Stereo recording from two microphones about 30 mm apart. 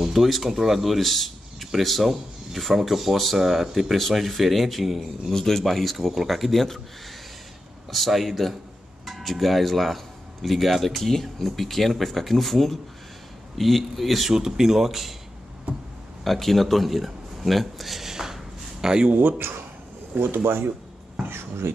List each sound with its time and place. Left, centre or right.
0.0 s speech: centre
4.1 s speech: centre
5.3 s speech: centre
7.9 s speech: centre
14.3 s speech: centre
16.3 s speech: centre
18.0 s a sound: centre
19.1 s speech: right
20.1 s speech: right